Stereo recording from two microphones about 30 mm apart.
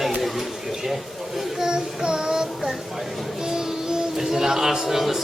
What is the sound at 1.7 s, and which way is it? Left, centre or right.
Child singing, right.